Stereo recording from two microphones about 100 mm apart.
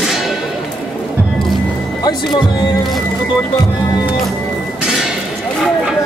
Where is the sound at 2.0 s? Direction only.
45° left (ahead or behind).